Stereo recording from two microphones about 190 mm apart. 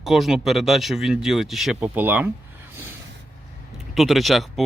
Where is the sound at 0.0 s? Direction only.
Centre (ahead or behind).